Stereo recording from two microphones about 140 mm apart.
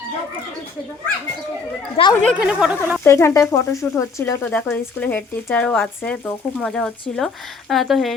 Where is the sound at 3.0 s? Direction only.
20° left (ahead or behind).